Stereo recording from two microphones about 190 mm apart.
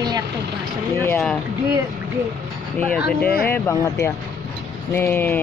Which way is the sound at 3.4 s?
15° left (ahead or behind).